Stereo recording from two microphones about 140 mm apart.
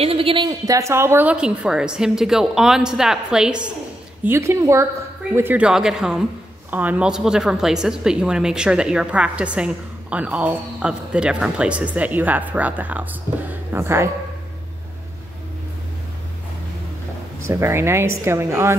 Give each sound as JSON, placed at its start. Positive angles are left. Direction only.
{"t": 0.0, "sound": "a woman's voice", "side_deg": -40}
{"t": 0.5, "sound": "a woman's voice", "side_deg": -25}
{"t": 1.3, "sound": "a woman's voice", "side_deg": -5}
{"t": 4.2, "sound": "a woman's voice", "side_deg": -20}
{"t": 17.5, "sound": "a woman's voice", "side_deg": -20}